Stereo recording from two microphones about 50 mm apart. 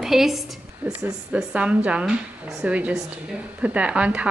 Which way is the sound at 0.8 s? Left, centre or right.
Right.